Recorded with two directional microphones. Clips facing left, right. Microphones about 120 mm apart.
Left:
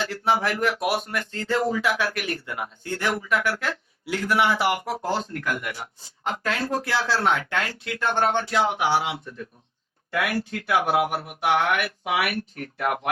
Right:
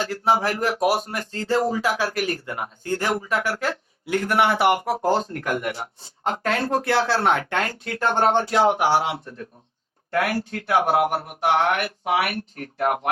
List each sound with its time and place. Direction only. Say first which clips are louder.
0.0 s speech: right 2 dB; 40° right (ahead or behind)
5.5 s speech: right 4 dB; 30° right (ahead or behind)
6.2 s speech: right 3 dB; 45° right (ahead or behind)